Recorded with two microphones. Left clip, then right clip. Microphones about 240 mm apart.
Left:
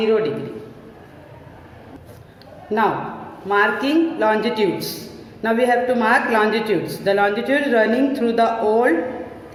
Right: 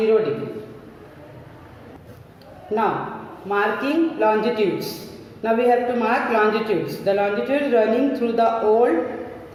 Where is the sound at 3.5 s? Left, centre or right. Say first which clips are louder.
Left 4 dB; centre.